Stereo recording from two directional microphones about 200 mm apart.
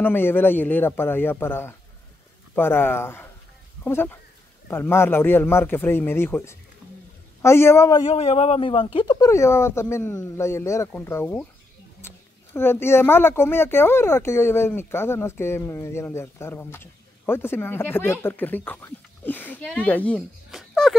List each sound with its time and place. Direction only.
0.0 s speech: 10° left (ahead or behind)
8.0 s speech: 30° left (ahead or behind); by 11.4 s 10° left (ahead or behind)
12.0 s a sound: 10° left (ahead or behind)
12.5 s speech: 10° left (ahead or behind)